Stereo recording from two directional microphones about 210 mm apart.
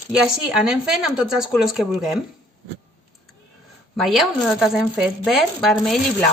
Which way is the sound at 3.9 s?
Centre (ahead or behind).